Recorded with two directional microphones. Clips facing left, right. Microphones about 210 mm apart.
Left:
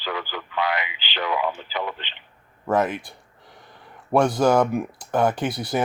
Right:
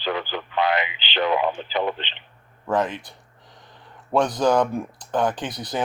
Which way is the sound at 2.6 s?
10° left (ahead or behind).